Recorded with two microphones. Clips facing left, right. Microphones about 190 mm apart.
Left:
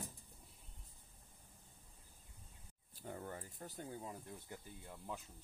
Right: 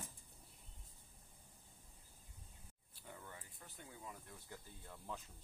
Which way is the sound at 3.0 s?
45° left (ahead or behind).